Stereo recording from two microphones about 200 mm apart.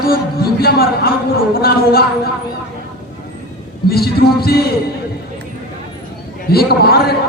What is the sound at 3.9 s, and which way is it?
Speech, 50° left (ahead or behind).